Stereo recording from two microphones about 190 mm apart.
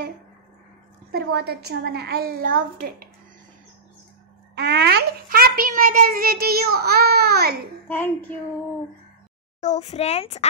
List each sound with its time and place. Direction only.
1.1 s a woman's voice: 55° right (ahead or behind)
4.6 s a child's voice: 60° right (ahead or behind)
7.9 s child singing: 10° left (ahead or behind)
9.6 s a child's voice: 35° left (ahead or behind)